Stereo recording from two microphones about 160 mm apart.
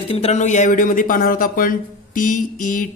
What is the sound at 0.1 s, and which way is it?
A man's voice, 40° left (ahead or behind).